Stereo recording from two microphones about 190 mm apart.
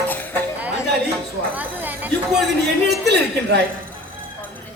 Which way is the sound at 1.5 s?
10° right (ahead or behind).